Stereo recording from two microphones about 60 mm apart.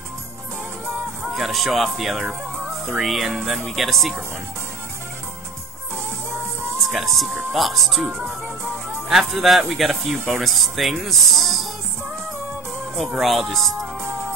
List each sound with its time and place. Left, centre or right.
1.3 s speech: centre
2.9 s music: centre
3.4 s speech: centre
6.9 s speech: centre
9.1 s speech: centre
12.9 s speech: centre